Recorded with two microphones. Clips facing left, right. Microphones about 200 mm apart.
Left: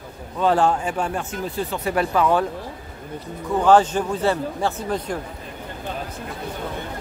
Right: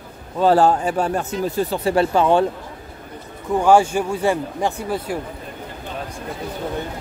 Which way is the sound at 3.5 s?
10° right (ahead or behind).